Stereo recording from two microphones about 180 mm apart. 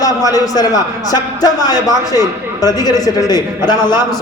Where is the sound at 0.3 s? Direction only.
20° left (ahead or behind).